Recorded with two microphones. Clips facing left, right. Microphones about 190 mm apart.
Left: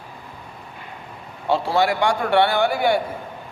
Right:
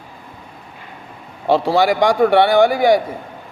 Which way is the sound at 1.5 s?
70° right (ahead or behind).